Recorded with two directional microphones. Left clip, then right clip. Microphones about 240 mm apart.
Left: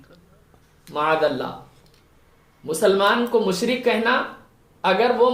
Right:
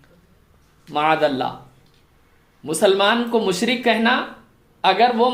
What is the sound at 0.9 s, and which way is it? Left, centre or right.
Speech, right.